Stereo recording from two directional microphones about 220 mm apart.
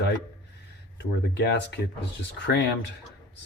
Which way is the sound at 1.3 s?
50° left (ahead or behind).